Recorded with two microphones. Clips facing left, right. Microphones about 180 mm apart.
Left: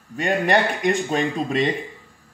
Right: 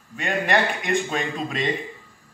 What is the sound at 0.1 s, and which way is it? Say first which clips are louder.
Speech: left 3 dB; 35° left (ahead or behind).